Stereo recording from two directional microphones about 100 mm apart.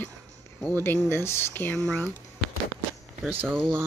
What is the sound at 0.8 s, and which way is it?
Speech, 25° left (ahead or behind).